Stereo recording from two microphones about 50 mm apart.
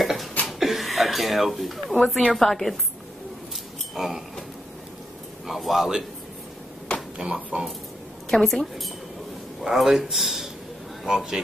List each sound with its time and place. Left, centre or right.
0.0 s a sound: centre
0.5 s speech: centre
3.9 s speech: centre
5.5 s speech: centre
7.2 s speech: centre
8.3 s speech: centre